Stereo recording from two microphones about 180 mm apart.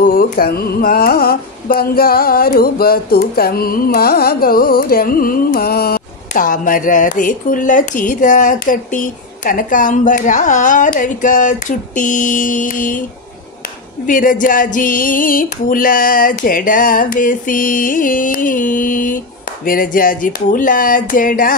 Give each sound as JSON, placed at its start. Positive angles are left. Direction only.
{"t": 0.0, "sound": "carnatic music", "side_deg": 55}
{"t": 14.0, "sound": "carnatic music", "side_deg": 50}